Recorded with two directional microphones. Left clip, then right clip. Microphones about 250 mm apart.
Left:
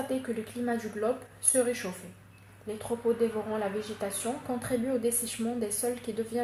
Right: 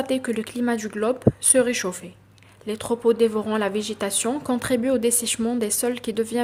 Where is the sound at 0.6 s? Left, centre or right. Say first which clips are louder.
Right 6 dB; right.